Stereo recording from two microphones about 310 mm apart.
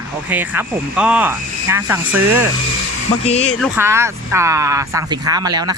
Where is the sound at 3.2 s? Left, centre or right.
Left.